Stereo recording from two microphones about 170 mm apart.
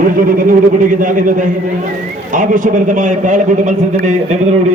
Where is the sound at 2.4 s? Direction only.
50° right (ahead or behind).